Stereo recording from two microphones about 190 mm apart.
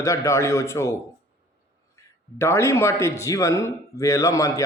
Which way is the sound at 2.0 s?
15° left (ahead or behind).